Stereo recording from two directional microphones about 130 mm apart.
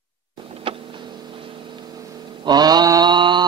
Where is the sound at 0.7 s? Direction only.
40° right (ahead or behind).